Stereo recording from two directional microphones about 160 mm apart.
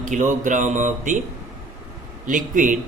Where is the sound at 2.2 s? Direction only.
55° right (ahead or behind).